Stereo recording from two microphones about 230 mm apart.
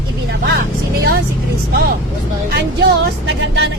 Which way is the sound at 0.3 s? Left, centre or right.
Right.